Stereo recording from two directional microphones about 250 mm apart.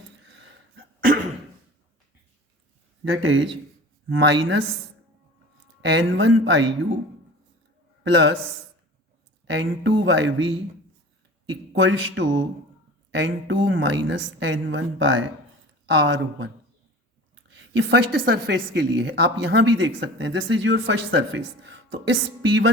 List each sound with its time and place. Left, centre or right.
3.0 s a woman's voice: right
5.9 s a woman's voice: right
8.0 s a woman's voice: right
9.5 s a woman's voice: right
11.7 s a woman's voice: right
17.7 s a woman's voice: right